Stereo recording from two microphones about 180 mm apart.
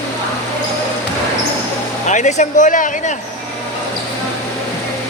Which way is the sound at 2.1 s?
40° left (ahead or behind).